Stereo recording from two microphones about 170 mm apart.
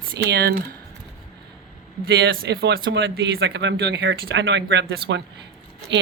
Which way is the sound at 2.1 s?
80° right.